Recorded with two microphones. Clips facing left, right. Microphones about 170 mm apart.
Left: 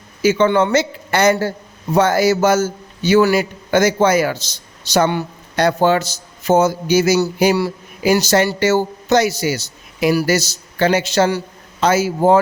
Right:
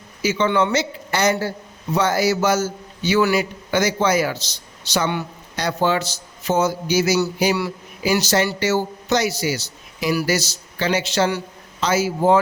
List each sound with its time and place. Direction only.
0.2 s a man's voice: 50° left (ahead or behind)
11.8 s a man's voice: 50° left (ahead or behind)